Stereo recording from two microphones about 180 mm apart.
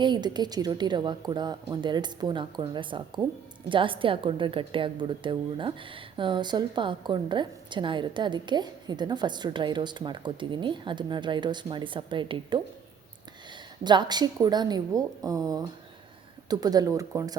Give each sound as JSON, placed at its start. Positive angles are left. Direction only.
{"t": 0.0, "sound": "a woman's voice", "side_deg": -25}
{"t": 13.8, "sound": "a woman's voice", "side_deg": -25}